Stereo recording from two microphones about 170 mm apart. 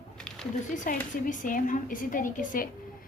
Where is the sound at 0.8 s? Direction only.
50° left (ahead or behind).